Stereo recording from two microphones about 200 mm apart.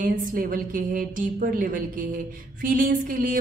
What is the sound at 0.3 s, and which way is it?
A woman's voice, 45° right (ahead or behind).